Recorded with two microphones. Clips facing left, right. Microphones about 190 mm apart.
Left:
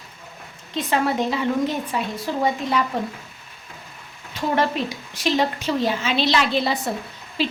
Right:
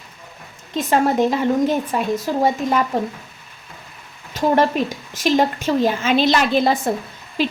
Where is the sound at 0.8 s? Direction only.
45° right (ahead or behind).